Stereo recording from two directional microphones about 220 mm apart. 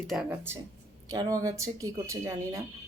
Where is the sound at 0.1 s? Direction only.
5° right (ahead or behind).